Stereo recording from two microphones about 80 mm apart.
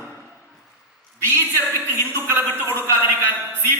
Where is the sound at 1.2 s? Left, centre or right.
Right.